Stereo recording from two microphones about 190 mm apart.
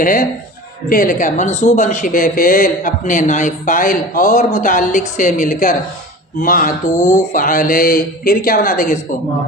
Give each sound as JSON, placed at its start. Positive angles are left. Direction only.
{"t": 0.0, "sound": "a man's voice", "side_deg": 45}